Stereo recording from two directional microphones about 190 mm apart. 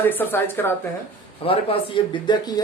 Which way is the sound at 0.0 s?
10° left (ahead or behind).